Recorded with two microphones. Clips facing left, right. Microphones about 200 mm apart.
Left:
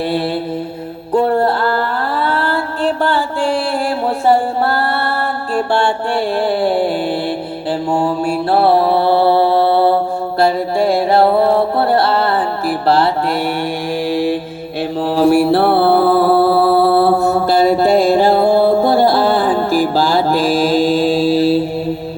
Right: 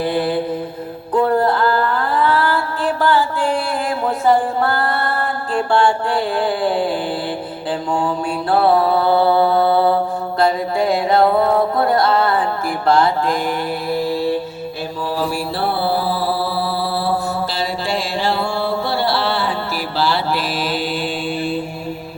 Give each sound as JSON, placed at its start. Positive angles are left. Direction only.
{"t": 1.1, "sound": "music", "side_deg": 30}
{"t": 5.7, "sound": "mantra", "side_deg": 25}
{"t": 7.9, "sound": "mantra", "side_deg": 25}
{"t": 10.4, "sound": "music", "side_deg": 30}
{"t": 13.9, "sound": "mantra", "side_deg": 90}
{"t": 15.0, "sound": "mantra", "side_deg": 65}